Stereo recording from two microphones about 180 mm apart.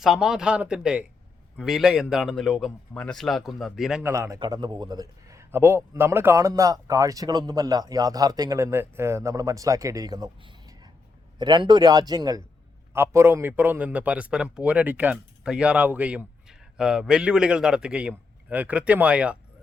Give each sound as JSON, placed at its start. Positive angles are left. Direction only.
{"t": 0.0, "sound": "a man's voice", "side_deg": 0}
{"t": 4.0, "sound": "a man's voice", "side_deg": -15}